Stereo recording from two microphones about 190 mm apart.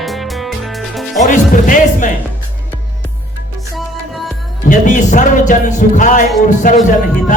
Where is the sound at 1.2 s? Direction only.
40° left (ahead or behind).